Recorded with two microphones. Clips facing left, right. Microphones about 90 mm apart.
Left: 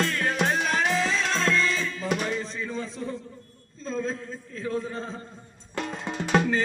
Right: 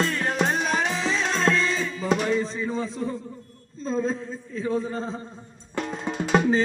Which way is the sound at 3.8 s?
35° right (ahead or behind).